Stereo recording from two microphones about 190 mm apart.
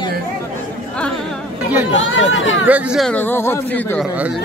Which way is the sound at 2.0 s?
90° left.